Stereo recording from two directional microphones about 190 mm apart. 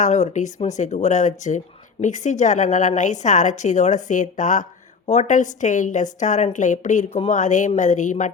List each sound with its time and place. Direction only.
0.0 s speech: 40° left (ahead or behind)